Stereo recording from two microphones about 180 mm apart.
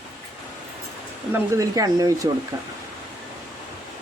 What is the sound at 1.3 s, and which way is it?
Speech, 20° right (ahead or behind).